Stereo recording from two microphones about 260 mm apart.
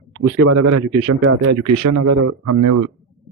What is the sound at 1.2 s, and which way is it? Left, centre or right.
Speech, right.